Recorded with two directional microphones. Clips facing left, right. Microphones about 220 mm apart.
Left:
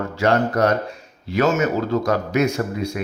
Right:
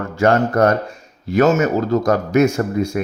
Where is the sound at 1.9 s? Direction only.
45° right (ahead or behind).